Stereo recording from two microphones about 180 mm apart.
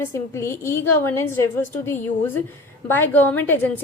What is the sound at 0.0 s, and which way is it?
A woman's voice, 15° left (ahead or behind).